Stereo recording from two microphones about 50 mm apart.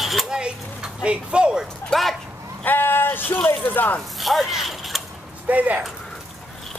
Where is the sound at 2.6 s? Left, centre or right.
Left.